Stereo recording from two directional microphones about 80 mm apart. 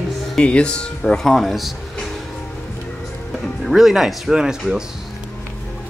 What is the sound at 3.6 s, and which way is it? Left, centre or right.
Speech, centre.